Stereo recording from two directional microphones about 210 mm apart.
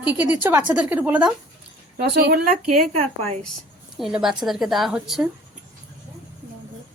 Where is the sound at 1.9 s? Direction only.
50° right (ahead or behind).